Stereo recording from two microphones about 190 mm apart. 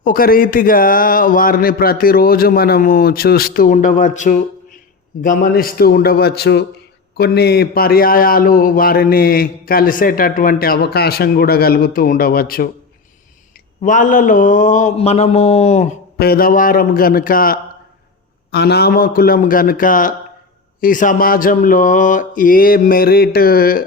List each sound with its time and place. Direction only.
0.0 s a man's voice: 50° left (ahead or behind)
13.8 s speech: 40° left (ahead or behind)
16.1 s a man's voice: 55° left (ahead or behind)
18.5 s a man's voice: 60° left (ahead or behind)